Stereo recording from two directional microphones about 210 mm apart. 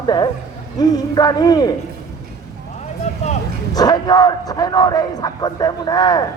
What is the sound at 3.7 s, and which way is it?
Speech, 20° left (ahead or behind).